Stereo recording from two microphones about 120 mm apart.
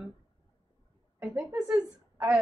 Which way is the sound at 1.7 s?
30° right (ahead or behind).